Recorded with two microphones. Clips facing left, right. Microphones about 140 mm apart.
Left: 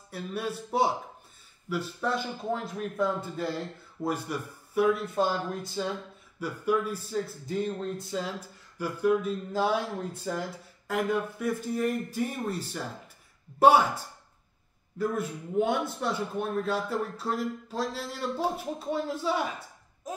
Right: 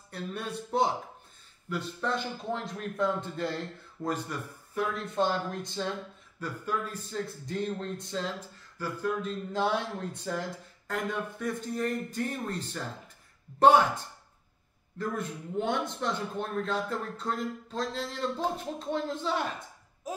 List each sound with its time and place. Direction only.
0.1 s a man's voice: 5° left (ahead or behind)